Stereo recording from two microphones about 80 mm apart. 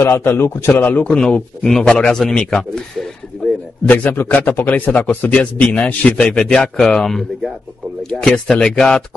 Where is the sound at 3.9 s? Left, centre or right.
Left.